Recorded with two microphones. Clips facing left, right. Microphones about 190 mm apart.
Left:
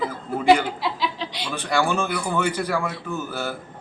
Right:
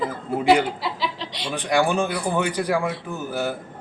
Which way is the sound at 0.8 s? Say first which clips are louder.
Left 1 dB; centre (ahead or behind).